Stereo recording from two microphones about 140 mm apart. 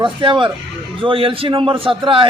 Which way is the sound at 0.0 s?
35° right (ahead or behind).